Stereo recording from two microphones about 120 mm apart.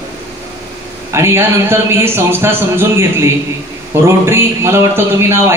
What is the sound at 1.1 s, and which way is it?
A man's voice, 20° right (ahead or behind).